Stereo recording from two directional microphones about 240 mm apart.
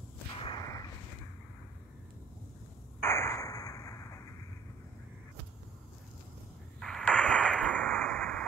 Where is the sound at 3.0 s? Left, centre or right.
Centre.